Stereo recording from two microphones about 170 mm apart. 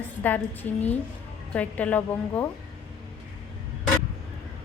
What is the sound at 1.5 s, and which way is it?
Speech, 10° left (ahead or behind).